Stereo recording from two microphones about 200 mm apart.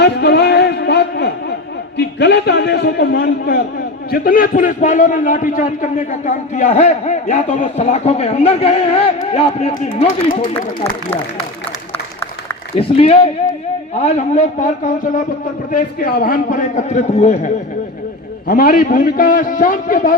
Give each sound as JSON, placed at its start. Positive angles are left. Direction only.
{"t": 0.0, "sound": "a sound", "side_deg": 55}
{"t": 2.0, "sound": "a man's voice", "side_deg": 55}
{"t": 12.7, "sound": "a man's voice", "side_deg": 30}